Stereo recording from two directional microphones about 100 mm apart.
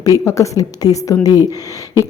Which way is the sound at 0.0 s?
35° left (ahead or behind).